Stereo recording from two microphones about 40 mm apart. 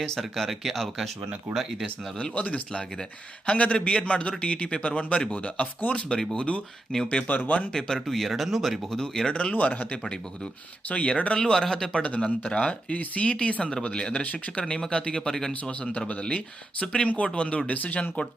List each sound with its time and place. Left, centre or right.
0.0 s speech: centre
0.6 s speech: centre
2.3 s a man's voice: left
7.3 s a man's voice: left
7.7 s speech: centre
8.9 s speech: centre
9.3 s a man's voice: left
11.3 s speech: centre
12.9 s a man's voice: left; by 15.9 s centre
15.9 s a man's voice: left
16.8 s speech: left
17.1 s a man's voice: left